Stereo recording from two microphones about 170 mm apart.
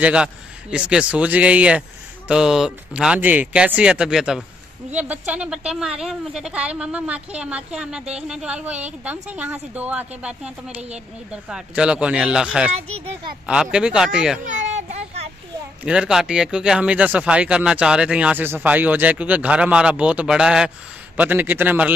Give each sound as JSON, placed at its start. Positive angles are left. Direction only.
{"t": 0.0, "sound": "speech", "side_deg": -5}
{"t": 14.4, "sound": "a sound", "side_deg": -45}
{"t": 15.8, "sound": "speech", "side_deg": -5}